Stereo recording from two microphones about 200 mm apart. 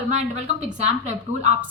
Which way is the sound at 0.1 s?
35° right (ahead or behind).